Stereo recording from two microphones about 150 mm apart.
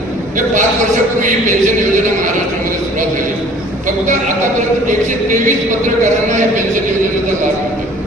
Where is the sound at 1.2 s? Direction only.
60° right (ahead or behind).